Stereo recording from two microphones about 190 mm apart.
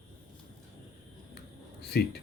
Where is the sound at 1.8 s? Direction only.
60° left (ahead or behind).